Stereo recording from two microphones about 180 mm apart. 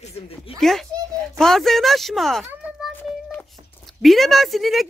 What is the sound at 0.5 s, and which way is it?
Speech, centre (ahead or behind).